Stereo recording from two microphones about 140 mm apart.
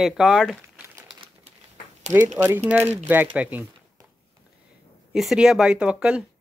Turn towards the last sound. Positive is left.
turn(degrees=-5)  # may be behind; listen again after turning